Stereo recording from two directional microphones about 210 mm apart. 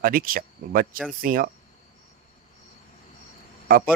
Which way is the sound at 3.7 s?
45° right (ahead or behind).